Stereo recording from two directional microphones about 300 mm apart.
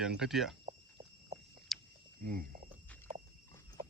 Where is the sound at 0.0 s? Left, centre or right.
Centre.